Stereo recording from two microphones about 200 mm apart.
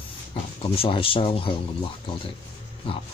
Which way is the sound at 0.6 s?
30° left (ahead or behind).